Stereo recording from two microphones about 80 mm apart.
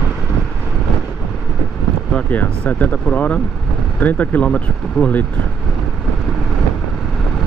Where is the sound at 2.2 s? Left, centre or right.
Centre.